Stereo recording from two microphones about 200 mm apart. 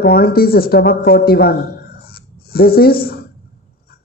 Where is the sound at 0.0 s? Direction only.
50° left (ahead or behind).